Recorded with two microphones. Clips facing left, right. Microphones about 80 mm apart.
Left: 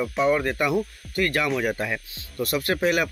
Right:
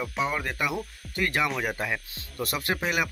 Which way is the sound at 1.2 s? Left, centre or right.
Centre.